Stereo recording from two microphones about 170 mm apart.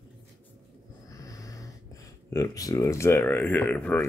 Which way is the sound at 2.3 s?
20° left (ahead or behind).